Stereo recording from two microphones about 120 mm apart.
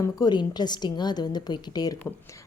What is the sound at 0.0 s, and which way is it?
A woman's voice, 35° left (ahead or behind).